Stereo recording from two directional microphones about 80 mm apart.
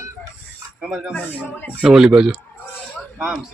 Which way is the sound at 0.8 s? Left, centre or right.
Centre.